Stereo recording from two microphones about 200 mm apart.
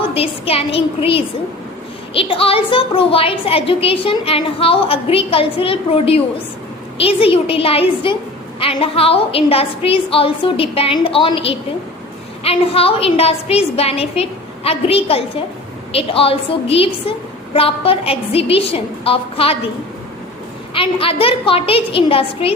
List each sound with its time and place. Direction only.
0.1 s a woman's voice: 30° left (ahead or behind)
20.7 s a woman's voice: 25° left (ahead or behind)